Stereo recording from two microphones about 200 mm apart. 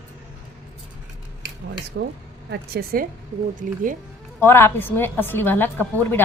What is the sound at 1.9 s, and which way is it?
Speech, 70° right (ahead or behind).